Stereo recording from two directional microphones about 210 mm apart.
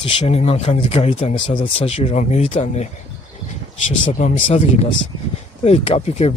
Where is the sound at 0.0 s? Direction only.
30° left (ahead or behind).